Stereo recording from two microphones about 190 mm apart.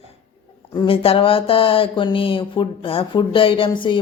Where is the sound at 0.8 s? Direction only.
30° left (ahead or behind).